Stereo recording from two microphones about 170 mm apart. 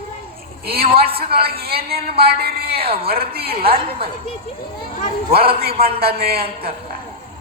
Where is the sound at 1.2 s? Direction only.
65° right (ahead or behind).